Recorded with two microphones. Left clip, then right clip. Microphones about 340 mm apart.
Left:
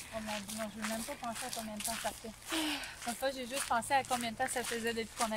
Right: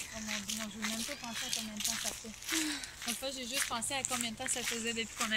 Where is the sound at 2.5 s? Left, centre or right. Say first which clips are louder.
Even; centre.